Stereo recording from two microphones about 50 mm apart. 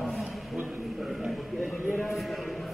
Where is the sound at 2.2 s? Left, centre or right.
Centre.